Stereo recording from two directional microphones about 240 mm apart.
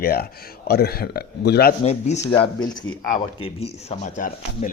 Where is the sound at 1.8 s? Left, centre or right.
Left.